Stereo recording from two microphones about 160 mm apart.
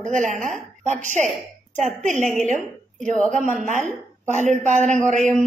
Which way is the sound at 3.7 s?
50° right (ahead or behind).